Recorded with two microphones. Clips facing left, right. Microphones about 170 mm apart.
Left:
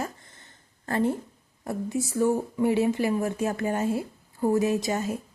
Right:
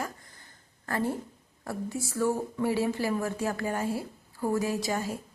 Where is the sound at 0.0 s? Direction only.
25° left (ahead or behind).